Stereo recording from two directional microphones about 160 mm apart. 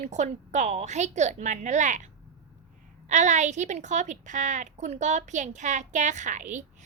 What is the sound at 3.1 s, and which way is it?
A woman's voice, 50° right (ahead or behind).